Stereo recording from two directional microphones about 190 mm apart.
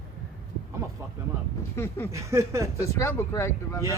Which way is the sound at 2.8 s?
15° left (ahead or behind).